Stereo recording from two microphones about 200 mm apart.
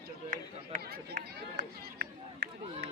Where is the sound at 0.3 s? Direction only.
45° right (ahead or behind).